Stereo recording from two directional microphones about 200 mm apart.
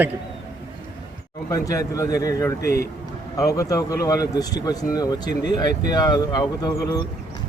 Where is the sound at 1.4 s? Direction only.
15° left (ahead or behind).